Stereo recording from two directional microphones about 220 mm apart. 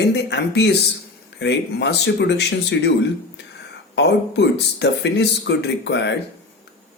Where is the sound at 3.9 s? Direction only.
50° left (ahead or behind).